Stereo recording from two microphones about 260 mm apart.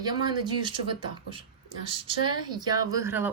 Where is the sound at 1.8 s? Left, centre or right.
Centre.